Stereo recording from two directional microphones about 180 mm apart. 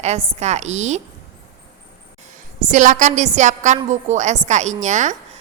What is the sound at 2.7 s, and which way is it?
A woman's voice, 45° right (ahead or behind).